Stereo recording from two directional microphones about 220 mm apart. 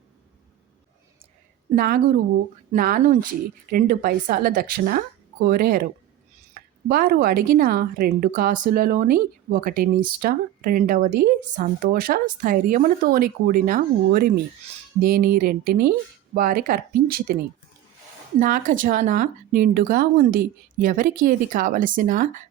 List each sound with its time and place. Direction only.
1.7 s speech: 45° right (ahead or behind)
18.3 s speech: 35° right (ahead or behind)